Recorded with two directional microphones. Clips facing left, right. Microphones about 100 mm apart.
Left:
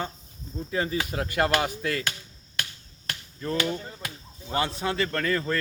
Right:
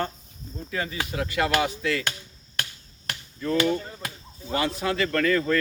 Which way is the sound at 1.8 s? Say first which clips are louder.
Right 2 dB; 40° left (ahead or behind).